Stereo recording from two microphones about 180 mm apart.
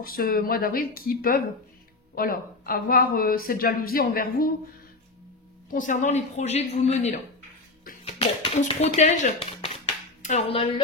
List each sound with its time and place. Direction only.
0.0 s speech: 55° left (ahead or behind)
5.7 s a man's voice: 45° left (ahead or behind)